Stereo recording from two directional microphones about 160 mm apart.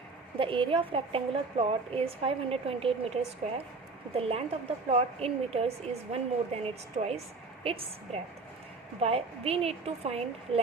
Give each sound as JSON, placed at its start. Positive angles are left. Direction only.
{"t": 0.3, "sound": "a woman's voice", "side_deg": -35}
{"t": 4.2, "sound": "a woman's voice", "side_deg": -35}